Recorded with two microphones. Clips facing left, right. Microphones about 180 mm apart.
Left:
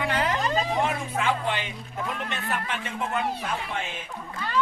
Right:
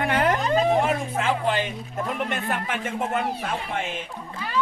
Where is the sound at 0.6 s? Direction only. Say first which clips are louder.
Right 5 dB; 55° right (ahead or behind).